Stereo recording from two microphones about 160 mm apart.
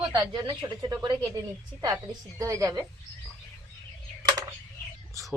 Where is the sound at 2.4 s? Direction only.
20° right (ahead or behind).